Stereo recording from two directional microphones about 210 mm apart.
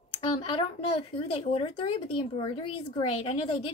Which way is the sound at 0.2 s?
25° left (ahead or behind).